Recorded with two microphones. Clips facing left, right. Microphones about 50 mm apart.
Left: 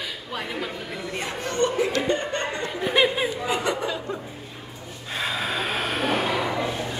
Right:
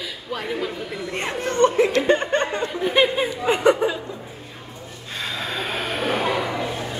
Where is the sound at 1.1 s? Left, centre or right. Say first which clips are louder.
Right 5 dB; right.